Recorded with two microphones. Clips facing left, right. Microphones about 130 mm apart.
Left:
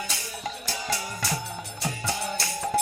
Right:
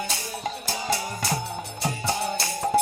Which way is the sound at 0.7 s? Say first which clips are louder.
Right 4 dB; 25° right (ahead or behind).